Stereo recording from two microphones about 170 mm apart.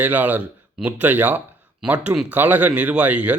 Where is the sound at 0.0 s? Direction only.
10° right (ahead or behind).